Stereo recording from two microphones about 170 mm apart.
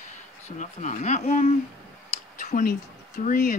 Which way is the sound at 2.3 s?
45° left (ahead or behind).